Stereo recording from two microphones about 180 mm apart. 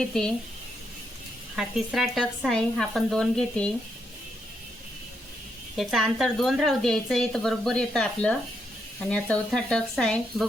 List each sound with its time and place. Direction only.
0.0 s a woman's voice: 5° left (ahead or behind)
1.5 s a woman's voice: centre (ahead or behind)
5.7 s a woman's voice: centre (ahead or behind)